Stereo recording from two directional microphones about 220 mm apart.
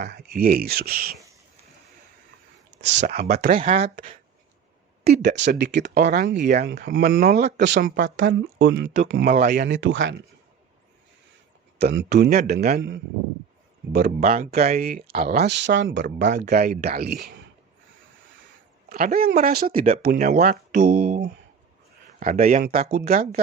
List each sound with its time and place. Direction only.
0.0 s speech: 50° right (ahead or behind)
3.0 s speech: 35° right (ahead or behind)
5.0 s speech: 50° right (ahead or behind)
8.3 s speech: 55° right (ahead or behind)
9.0 s speech: 40° right (ahead or behind)
9.6 s speech: 60° right (ahead or behind)
11.8 s speech: 50° right (ahead or behind)
18.9 s speech: 40° right (ahead or behind)